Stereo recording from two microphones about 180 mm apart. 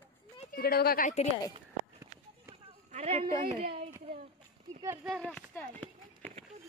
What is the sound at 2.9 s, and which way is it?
Speech, 35° right (ahead or behind).